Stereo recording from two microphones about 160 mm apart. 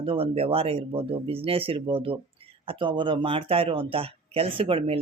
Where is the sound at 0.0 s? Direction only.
35° right (ahead or behind).